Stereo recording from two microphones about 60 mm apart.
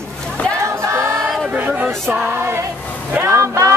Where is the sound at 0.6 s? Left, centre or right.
Right.